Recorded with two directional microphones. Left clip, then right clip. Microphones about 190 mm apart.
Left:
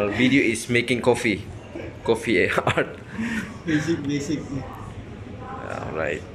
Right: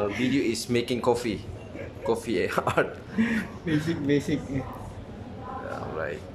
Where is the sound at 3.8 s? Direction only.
25° right (ahead or behind).